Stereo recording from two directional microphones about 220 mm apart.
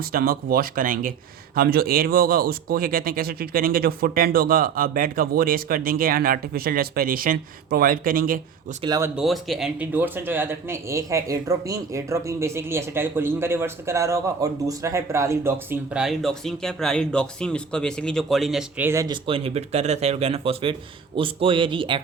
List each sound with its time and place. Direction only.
0.0 s speech: 40° right (ahead or behind)
8.8 s a man's voice: 15° right (ahead or behind)
9.2 s a man's voice: centre (ahead or behind); by 22.0 s 20° right (ahead or behind)